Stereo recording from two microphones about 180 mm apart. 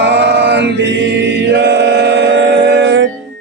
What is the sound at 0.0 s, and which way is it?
Chant, 75° right (ahead or behind).